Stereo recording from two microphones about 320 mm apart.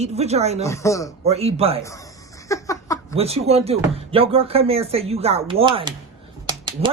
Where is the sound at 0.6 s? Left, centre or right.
Centre.